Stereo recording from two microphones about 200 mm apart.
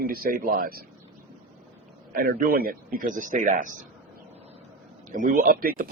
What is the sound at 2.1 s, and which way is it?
Speech, 45° right (ahead or behind).